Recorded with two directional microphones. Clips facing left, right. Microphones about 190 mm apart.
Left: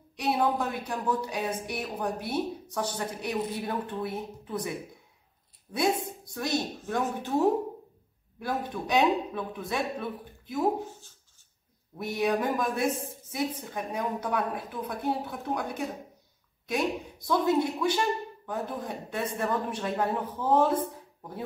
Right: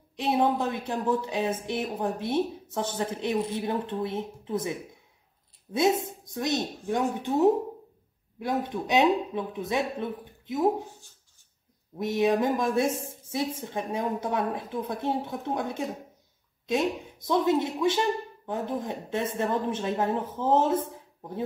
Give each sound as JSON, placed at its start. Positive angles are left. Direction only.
{"t": 0.1, "sound": "a woman's voice", "side_deg": -25}